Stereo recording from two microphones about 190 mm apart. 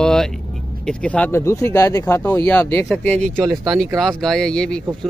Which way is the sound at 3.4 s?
20° right (ahead or behind).